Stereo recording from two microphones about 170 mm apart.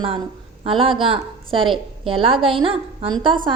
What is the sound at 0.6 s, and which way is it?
A woman's voice, 30° right (ahead or behind).